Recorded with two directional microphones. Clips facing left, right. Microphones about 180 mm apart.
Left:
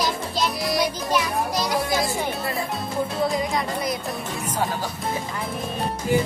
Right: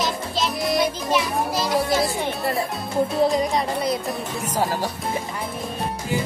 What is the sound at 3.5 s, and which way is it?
Music, 30° right (ahead or behind).